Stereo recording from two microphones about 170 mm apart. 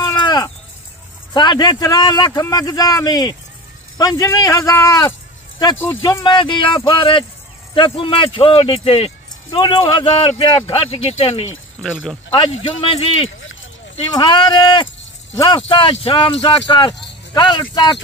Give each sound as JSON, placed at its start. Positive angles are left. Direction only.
{"t": 0.0, "sound": "a sound", "side_deg": 25}
{"t": 1.3, "sound": "a man's voice", "side_deg": 25}
{"t": 6.2, "sound": "a man's voice", "side_deg": 30}
{"t": 11.8, "sound": "speech", "side_deg": 5}
{"t": 12.4, "sound": "a man's voice", "side_deg": 30}